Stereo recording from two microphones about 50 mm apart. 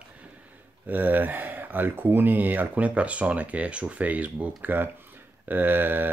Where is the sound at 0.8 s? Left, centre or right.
Right.